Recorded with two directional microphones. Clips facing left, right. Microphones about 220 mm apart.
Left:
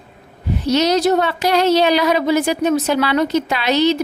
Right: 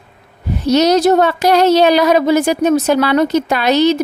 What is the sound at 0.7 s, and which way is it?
A woman's voice, 45° right (ahead or behind).